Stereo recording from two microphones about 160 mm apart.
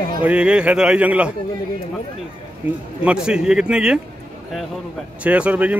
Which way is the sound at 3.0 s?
5° right (ahead or behind).